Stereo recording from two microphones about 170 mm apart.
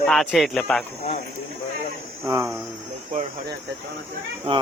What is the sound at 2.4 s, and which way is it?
Speech, 5° right (ahead or behind).